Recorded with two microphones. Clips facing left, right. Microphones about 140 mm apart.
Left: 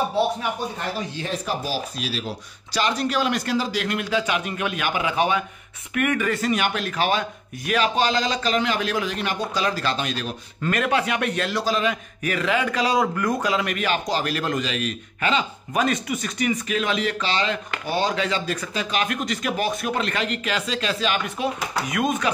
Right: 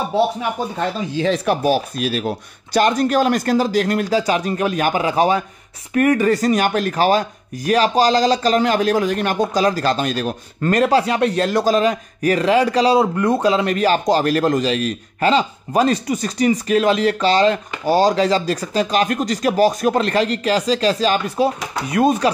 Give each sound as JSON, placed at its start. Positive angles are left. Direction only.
{"t": 1.2, "sound": "a man's voice", "side_deg": -80}
{"t": 11.5, "sound": "a man's voice", "side_deg": -45}